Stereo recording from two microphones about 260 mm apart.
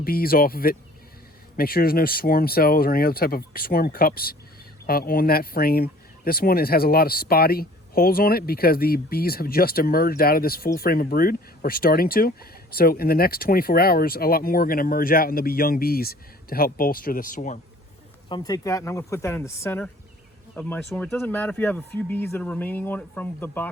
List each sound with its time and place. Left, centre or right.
0.0 s speech: left
18.3 s speech: centre